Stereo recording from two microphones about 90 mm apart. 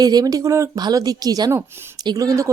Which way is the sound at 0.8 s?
45° right (ahead or behind).